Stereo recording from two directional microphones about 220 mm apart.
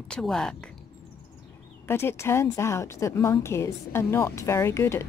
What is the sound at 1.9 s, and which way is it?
Speech, 10° left (ahead or behind).